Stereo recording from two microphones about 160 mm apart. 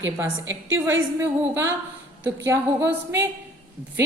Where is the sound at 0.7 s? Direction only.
15° right (ahead or behind).